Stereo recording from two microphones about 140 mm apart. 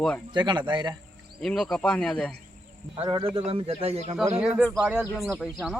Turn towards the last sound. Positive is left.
turn(degrees=0)  # may be behind; listen again after turning